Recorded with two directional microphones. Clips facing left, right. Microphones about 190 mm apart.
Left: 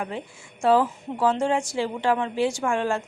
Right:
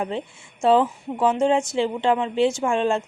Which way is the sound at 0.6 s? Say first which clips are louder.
Right 2 dB; 20° right (ahead or behind).